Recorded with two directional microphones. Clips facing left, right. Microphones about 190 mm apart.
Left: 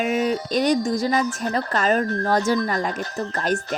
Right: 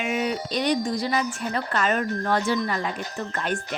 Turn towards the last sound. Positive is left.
turn(degrees=40)  # may be behind; listen again after turning